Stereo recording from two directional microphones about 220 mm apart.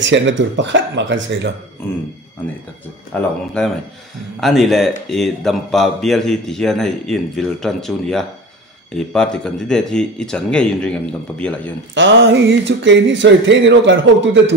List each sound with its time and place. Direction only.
0.0 s speech: 55° right (ahead or behind)
3.1 s speech: 5° left (ahead or behind)
11.9 s speech: 55° right (ahead or behind)